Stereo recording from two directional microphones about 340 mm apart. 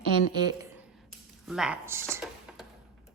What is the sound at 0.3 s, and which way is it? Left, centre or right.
Speech, centre.